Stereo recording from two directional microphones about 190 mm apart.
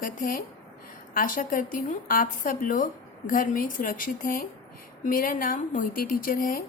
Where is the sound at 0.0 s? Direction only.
45° left (ahead or behind).